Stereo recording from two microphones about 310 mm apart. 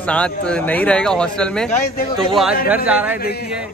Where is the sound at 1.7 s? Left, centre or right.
Left.